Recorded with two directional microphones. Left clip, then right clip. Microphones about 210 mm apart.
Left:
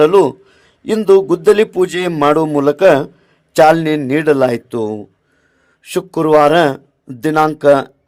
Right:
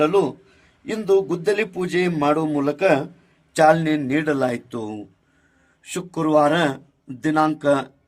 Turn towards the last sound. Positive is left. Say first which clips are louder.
# left 8 dB
turn(degrees=35)  # may be behind; listen again after turning